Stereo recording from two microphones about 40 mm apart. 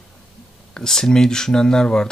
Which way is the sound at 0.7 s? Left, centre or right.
Centre.